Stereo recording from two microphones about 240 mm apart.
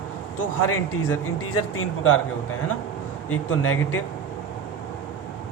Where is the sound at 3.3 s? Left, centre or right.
Left.